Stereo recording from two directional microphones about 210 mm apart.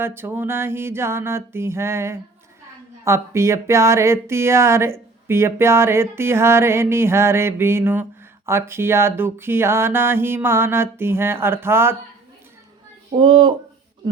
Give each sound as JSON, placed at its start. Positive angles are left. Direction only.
{"t": 0.0, "sound": "speech", "side_deg": -10}
{"t": 13.1, "sound": "speech", "side_deg": -25}